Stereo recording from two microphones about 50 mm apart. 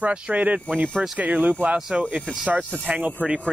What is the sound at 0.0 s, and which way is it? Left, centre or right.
Speech, right.